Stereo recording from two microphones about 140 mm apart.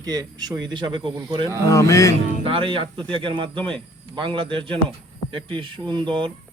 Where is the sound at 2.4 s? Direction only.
40° right (ahead or behind).